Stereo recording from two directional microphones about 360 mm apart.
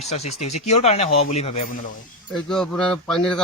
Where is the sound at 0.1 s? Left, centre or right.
Centre.